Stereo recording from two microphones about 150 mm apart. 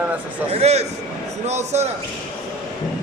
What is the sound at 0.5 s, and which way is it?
A man's voice, 45° right (ahead or behind).